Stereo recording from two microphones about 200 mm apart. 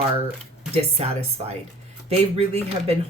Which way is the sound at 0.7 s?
30° right (ahead or behind).